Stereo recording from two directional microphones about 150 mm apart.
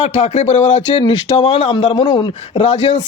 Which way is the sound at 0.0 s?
45° left (ahead or behind).